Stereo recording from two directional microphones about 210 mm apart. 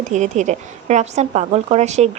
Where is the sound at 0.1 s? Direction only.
35° right (ahead or behind).